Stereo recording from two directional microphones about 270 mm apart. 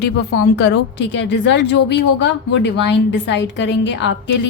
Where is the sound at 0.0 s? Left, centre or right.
Left.